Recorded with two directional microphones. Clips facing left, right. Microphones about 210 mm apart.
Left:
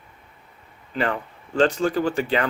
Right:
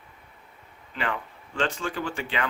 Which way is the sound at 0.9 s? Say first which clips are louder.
Left 6 dB; 40° left (ahead or behind).